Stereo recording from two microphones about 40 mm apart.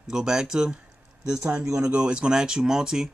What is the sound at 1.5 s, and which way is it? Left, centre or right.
Speech, right.